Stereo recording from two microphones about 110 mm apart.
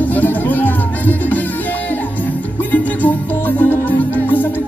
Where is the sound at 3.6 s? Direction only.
15° left (ahead or behind).